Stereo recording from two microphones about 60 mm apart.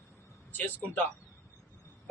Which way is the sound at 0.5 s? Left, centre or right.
Left.